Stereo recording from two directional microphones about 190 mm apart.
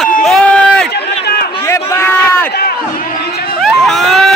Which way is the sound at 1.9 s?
10° left (ahead or behind).